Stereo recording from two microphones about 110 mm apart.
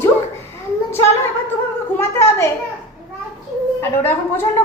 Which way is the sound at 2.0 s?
25° left (ahead or behind).